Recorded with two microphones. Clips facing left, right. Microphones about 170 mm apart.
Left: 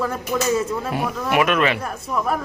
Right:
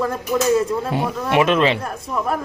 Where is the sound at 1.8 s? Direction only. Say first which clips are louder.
Even; centre (ahead or behind).